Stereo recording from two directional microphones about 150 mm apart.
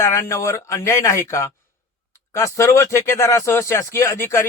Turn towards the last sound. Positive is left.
turn(degrees=20)  # may be behind; listen again after turning